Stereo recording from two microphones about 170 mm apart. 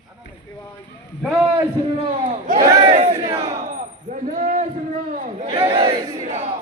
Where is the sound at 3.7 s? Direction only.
50° right (ahead or behind).